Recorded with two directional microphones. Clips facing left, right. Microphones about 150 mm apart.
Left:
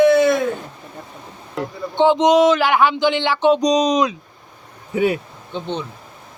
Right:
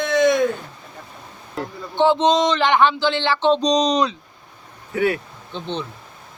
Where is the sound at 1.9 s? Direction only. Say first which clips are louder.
Left 3 dB; 15° left (ahead or behind).